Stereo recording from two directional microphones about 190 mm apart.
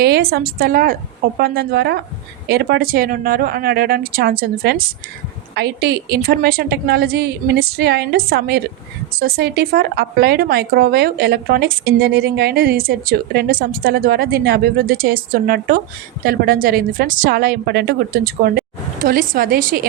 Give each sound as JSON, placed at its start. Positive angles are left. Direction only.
{"t": 0.0, "sound": "a woman's voice", "side_deg": -55}